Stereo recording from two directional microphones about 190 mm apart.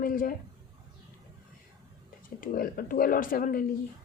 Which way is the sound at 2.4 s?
45° left (ahead or behind).